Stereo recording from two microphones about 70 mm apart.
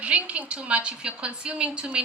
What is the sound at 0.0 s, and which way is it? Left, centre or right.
A woman's voice, centre.